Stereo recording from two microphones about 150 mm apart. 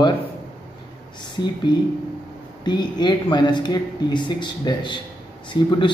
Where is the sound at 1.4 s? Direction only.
25° left (ahead or behind).